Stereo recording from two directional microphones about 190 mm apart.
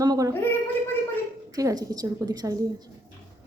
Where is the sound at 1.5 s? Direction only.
20° right (ahead or behind).